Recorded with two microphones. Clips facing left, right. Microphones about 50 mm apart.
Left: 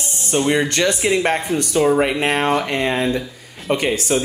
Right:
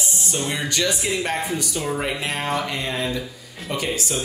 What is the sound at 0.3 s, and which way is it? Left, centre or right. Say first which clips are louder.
Speech: left 10 dB; left.